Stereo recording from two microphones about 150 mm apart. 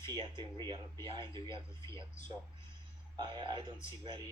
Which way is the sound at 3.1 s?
30° right (ahead or behind).